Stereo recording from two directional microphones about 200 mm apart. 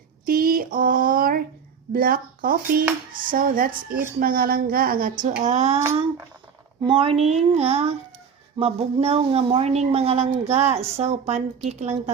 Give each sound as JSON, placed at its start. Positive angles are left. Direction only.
{"t": 0.3, "sound": "a sound", "side_deg": -45}
{"t": 1.9, "sound": "a woman's voice", "side_deg": -45}
{"t": 6.8, "sound": "a woman's voice", "side_deg": -30}